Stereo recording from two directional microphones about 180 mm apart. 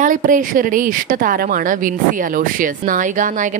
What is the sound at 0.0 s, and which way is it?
A woman's voice, 45° right (ahead or behind).